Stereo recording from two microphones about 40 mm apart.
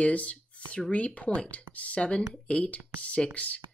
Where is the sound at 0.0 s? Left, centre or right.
Left.